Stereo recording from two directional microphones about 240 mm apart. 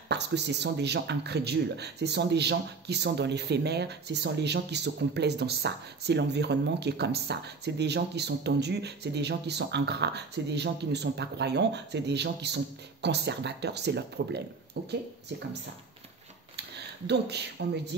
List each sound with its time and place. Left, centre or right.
0.1 s speech: right
17.1 s speech: right